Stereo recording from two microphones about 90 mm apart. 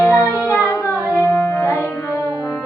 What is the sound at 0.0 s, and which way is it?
Music, 30° left (ahead or behind).